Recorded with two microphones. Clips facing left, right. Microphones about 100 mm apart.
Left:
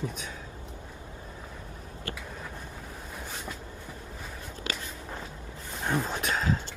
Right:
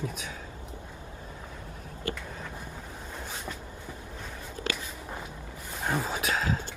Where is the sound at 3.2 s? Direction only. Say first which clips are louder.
Right 1 dB; centre (ahead or behind).